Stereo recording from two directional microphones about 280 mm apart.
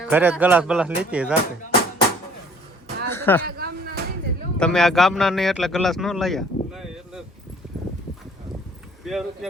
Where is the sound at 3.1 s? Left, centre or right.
Centre.